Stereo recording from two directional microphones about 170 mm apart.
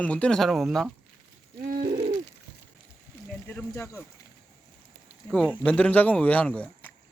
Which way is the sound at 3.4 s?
15° left (ahead or behind).